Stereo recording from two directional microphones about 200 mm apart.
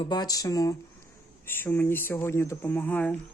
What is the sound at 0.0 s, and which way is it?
Speech, 20° left (ahead or behind).